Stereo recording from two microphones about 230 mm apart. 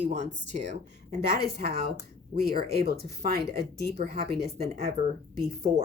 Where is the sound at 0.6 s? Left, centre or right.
Right.